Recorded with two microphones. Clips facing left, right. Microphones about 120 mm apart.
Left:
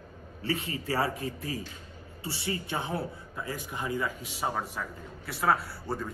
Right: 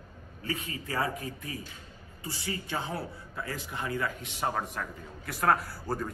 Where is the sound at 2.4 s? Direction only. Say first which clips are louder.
Left 1 dB; 20° left (ahead or behind).